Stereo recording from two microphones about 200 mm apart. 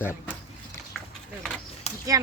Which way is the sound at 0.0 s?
10° left (ahead or behind).